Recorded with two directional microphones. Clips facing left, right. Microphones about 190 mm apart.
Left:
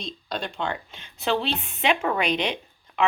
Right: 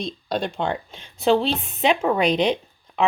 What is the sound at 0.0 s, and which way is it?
Speech, 45° right (ahead or behind).